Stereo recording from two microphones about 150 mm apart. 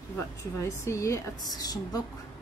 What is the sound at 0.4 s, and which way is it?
A woman's voice, 20° left (ahead or behind).